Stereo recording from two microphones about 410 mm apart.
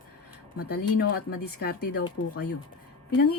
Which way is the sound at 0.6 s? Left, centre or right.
Left.